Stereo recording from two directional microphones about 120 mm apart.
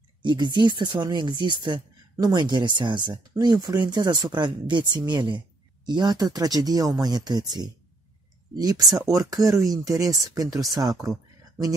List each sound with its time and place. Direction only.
0.2 s speech: 40° right (ahead or behind)